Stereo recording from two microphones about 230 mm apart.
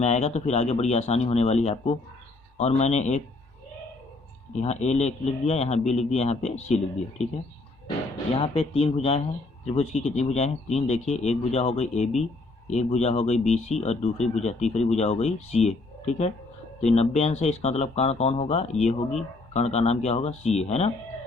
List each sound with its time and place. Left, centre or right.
0.0 s speech: left
4.6 s speech: left
8.3 s speech: left